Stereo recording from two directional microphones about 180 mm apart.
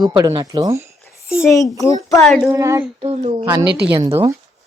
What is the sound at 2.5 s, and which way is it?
Speech, 15° right (ahead or behind).